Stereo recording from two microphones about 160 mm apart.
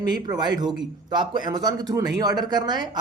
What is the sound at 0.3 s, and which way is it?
A man's voice, 25° right (ahead or behind).